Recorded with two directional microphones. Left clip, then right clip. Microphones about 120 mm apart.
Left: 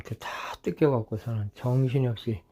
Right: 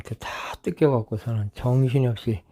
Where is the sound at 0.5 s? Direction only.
15° right (ahead or behind).